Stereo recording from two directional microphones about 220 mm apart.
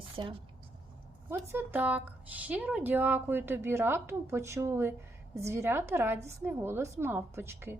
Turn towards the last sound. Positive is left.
turn(degrees=-10)  # may be behind; listen again after turning